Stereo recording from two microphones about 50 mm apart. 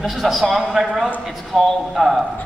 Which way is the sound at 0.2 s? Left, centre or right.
Centre.